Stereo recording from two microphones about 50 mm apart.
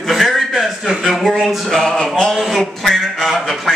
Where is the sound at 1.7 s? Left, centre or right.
Centre.